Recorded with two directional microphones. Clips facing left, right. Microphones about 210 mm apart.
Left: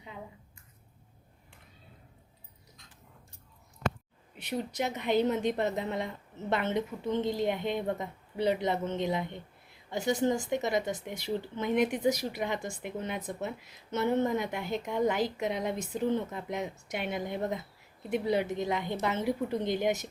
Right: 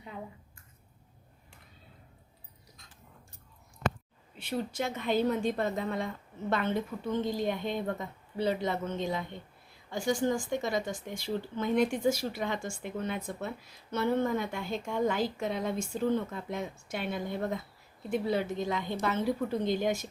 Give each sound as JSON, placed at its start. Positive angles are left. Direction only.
{"t": 4.4, "sound": "a woman's voice", "side_deg": 20}